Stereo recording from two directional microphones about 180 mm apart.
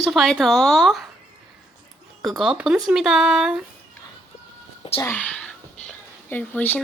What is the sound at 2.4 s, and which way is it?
Speech, 5° right (ahead or behind).